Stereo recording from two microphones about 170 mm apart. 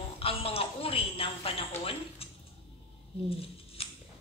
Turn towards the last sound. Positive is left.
turn(degrees=35)  # may be behind; listen again after turning